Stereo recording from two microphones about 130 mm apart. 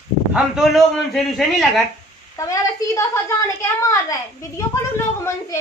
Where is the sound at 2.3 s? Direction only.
25° left (ahead or behind).